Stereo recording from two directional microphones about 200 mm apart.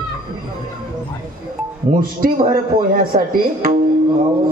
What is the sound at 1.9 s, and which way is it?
A man's voice, 35° right (ahead or behind).